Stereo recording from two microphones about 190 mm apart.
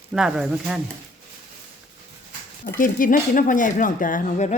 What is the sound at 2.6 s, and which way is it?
Speech, 45° left (ahead or behind).